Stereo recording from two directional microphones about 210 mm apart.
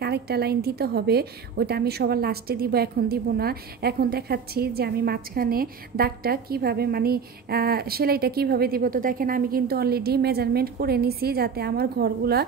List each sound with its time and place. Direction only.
0.0 s a woman's voice: 50° right (ahead or behind)